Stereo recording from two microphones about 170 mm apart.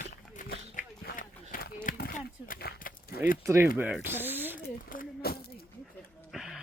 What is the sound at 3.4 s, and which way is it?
Speech, 15° right (ahead or behind).